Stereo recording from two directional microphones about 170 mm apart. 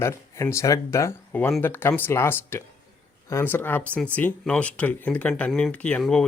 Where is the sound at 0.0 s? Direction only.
15° left (ahead or behind).